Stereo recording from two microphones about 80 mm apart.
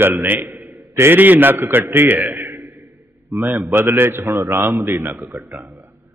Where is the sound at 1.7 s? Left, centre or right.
Right.